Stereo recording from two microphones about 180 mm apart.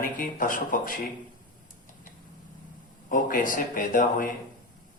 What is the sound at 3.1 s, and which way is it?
Speech, 50° left (ahead or behind).